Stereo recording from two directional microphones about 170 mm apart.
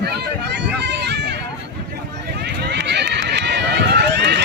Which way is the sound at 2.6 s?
85° right.